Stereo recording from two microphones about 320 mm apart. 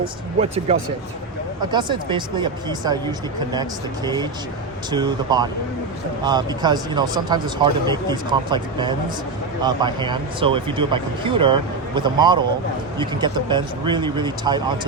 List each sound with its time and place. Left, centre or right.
0.0 s speech: centre